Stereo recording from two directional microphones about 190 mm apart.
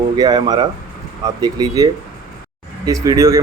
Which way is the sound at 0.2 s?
20° right (ahead or behind).